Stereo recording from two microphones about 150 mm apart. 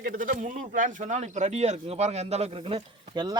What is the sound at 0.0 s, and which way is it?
A man's voice, 70° right (ahead or behind).